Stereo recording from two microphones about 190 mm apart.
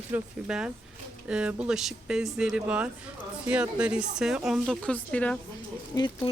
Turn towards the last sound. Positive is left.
turn(degrees=25)  # may be behind; listen again after turning